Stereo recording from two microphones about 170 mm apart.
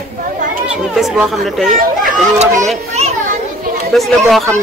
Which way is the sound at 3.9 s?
Centre (ahead or behind).